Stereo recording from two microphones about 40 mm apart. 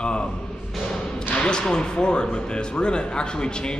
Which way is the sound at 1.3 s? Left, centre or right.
Left.